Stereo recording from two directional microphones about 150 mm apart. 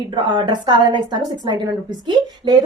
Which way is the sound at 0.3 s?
30° right (ahead or behind).